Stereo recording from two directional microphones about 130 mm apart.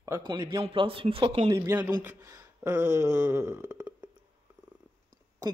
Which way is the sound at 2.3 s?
20° right (ahead or behind).